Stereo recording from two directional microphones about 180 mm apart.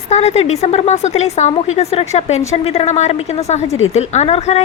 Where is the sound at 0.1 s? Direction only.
35° left (ahead or behind).